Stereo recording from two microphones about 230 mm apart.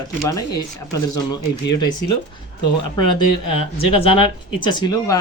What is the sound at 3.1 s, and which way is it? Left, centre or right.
Speech, left.